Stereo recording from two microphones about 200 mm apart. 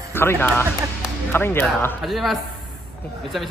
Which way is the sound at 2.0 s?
Centre (ahead or behind).